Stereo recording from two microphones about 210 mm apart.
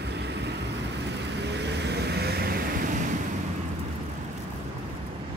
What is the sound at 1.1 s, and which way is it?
Vehicle, 55° right (ahead or behind).